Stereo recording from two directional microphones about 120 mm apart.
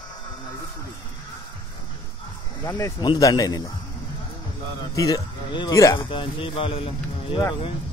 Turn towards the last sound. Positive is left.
turn(degrees=50)  # may be behind; listen again after turning